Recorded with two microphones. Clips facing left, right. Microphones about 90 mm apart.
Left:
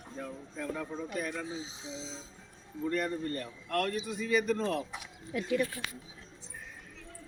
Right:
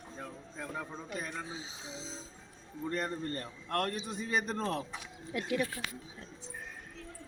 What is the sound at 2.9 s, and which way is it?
A man's voice, 30° right (ahead or behind).